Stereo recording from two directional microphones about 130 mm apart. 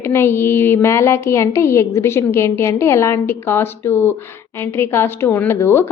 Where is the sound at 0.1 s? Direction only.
20° left (ahead or behind).